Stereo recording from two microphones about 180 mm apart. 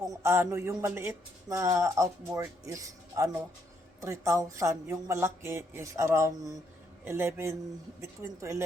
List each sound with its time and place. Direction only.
0.0 s speech: 15° right (ahead or behind)